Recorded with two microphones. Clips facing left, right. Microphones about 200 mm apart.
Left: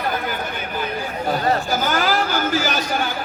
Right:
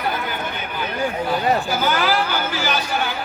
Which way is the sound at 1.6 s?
45° left (ahead or behind).